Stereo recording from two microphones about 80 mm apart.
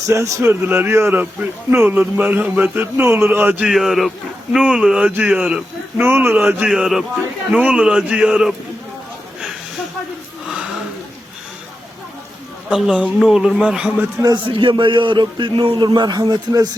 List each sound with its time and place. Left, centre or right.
0.1 s speech: right
0.6 s a man's voice: right
3.6 s speech: centre
6.0 s a man's voice: right
6.3 s speech: centre
6.7 s speech: centre
7.5 s speech: centre
12.7 s speech: centre
14.4 s a man's voice: right